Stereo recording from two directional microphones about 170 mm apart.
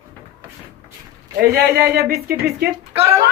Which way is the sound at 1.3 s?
65° right (ahead or behind).